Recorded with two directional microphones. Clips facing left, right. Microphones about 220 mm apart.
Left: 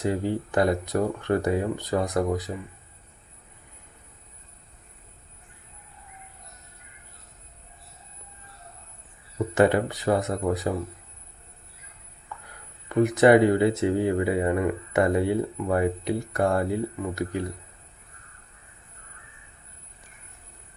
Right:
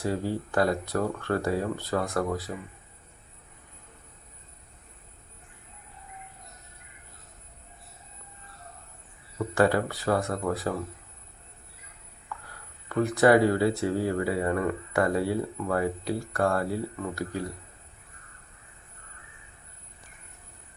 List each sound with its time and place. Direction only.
0.0 s speech: 20° left (ahead or behind)
9.6 s speech: 20° left (ahead or behind)
12.9 s speech: 20° left (ahead or behind)